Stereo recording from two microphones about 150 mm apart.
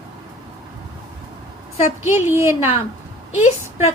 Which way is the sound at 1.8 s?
15° right (ahead or behind).